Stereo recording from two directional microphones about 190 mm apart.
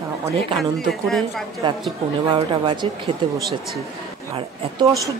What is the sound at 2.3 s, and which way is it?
A man's voice, 25° right (ahead or behind).